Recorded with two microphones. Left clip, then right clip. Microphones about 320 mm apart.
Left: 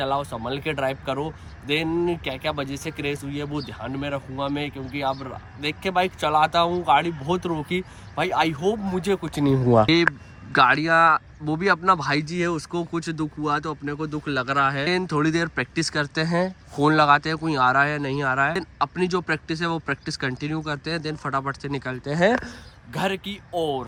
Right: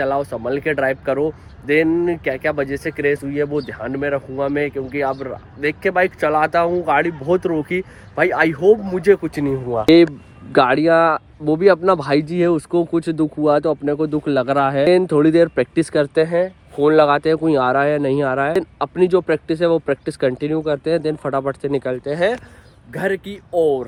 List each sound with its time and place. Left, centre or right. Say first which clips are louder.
0.0 s speech: right 6 dB; centre
5.8 s speech: right 5 dB; centre
9.5 s speech: left 4 dB; left
9.9 s speech: right 8 dB; centre